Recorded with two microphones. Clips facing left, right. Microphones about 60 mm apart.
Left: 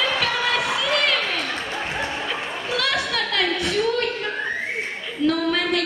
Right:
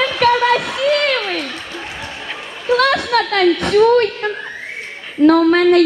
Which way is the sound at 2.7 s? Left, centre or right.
Right.